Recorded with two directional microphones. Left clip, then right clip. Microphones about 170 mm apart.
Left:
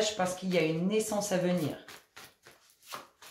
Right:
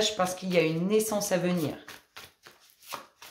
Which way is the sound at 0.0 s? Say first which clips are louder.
Right 3 dB; 35° right (ahead or behind).